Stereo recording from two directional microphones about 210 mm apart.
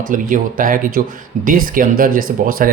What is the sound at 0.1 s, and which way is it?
Speech, 40° right (ahead or behind).